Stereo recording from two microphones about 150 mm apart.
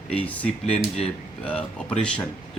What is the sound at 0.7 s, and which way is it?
Speech, 45° left (ahead or behind).